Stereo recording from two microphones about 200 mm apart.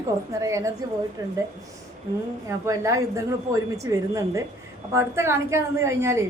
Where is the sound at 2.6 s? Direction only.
15° right (ahead or behind).